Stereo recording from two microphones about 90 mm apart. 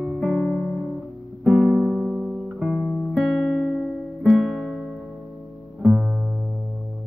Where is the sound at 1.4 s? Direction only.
10° left (ahead or behind).